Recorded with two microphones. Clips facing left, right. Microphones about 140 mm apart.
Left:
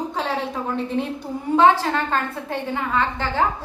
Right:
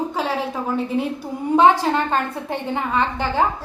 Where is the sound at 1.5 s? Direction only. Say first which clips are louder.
Right 1 dB; 15° right (ahead or behind).